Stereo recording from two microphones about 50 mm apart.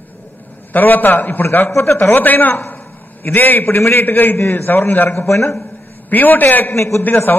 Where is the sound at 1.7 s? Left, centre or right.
Left.